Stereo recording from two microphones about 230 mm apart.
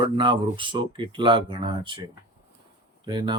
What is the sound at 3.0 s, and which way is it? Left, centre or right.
Speech, centre.